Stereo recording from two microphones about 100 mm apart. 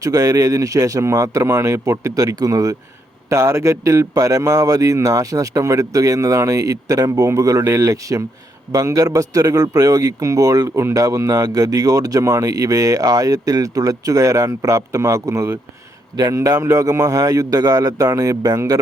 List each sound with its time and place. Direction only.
0.0 s speech: 35° right (ahead or behind)